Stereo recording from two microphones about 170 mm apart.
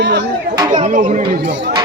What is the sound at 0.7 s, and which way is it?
Speech, 45° right (ahead or behind).